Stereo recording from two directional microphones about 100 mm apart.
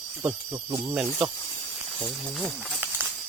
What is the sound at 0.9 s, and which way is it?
Speech, 10° right (ahead or behind).